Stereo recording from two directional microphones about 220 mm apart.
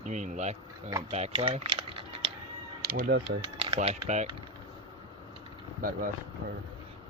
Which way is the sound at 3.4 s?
25° right (ahead or behind).